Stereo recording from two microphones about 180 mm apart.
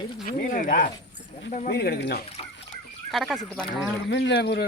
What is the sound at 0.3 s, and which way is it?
Speech, 50° left (ahead or behind).